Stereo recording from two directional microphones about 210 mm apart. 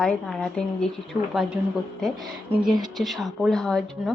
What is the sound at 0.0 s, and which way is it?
Speech, 5° left (ahead or behind).